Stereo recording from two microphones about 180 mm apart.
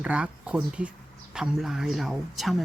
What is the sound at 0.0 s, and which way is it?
Speech, 5° right (ahead or behind).